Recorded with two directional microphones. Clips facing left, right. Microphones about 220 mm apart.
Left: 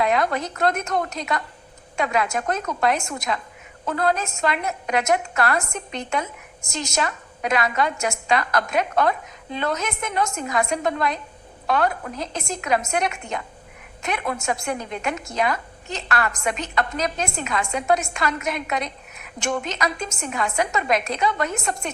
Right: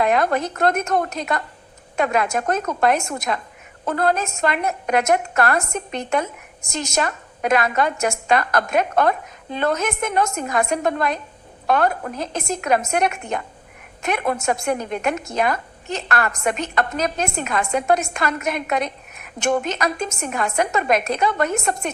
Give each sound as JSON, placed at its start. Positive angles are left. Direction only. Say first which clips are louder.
{"t": 0.0, "sound": "a woman's voice", "louder": "right 3 dB", "side_deg": -50}